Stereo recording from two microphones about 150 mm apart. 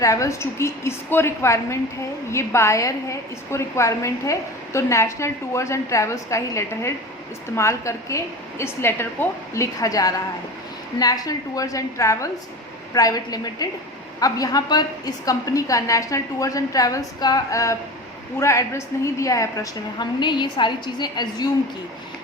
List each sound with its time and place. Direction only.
0.0 s a woman's voice: 20° left (ahead or behind)